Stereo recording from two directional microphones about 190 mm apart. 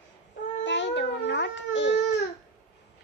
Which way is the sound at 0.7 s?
70° left (ahead or behind).